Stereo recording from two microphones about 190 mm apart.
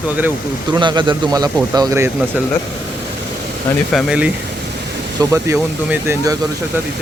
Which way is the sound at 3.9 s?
Centre (ahead or behind).